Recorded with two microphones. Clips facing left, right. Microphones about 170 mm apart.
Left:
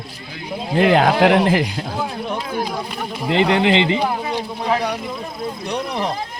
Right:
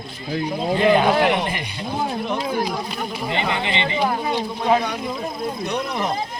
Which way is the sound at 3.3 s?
90° left.